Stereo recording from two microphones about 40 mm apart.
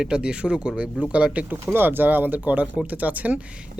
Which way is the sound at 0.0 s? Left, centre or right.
Right.